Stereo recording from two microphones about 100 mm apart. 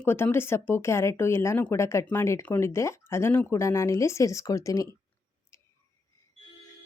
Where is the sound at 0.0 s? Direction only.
20° left (ahead or behind).